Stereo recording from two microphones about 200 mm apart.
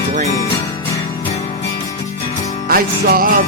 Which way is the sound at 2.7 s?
45° right (ahead or behind).